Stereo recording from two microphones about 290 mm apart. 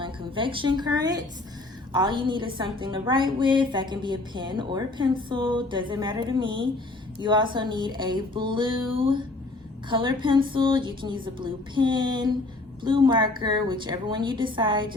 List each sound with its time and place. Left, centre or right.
0.0 s a woman's voice: centre